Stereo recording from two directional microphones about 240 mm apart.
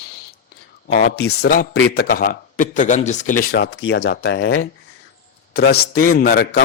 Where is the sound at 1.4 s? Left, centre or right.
Left.